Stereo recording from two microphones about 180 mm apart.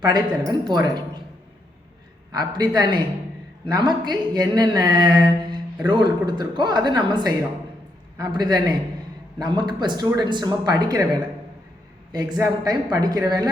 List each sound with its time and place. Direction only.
0.6 s speech: 25° right (ahead or behind)
2.3 s speech: 20° right (ahead or behind)